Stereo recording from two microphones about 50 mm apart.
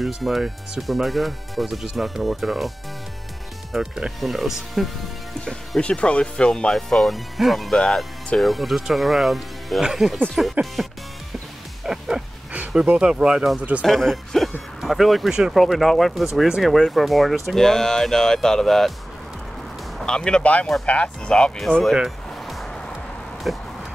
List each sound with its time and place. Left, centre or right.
0.0 s speech: centre
3.7 s speech: centre
5.8 s speech: left
6.7 s speech: centre
7.7 s speech: centre
8.4 s speech: centre
11.8 s music: centre
12.9 s speech: centre
13.6 s speech: right
13.8 s speech: centre
16.3 s speech: centre
20.0 s speech: centre
23.5 s speech: centre